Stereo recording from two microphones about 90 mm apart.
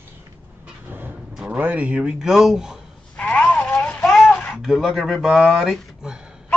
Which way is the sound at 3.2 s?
15° left (ahead or behind).